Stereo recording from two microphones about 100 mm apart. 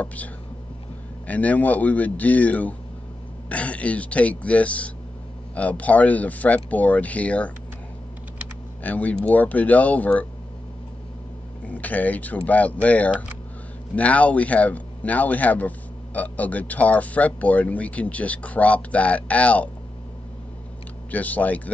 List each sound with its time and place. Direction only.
0.0 s speech: 15° left (ahead or behind)
8.8 s speech: 15° left (ahead or behind)
11.6 s speech: 15° left (ahead or behind)
21.1 s speech: 15° left (ahead or behind)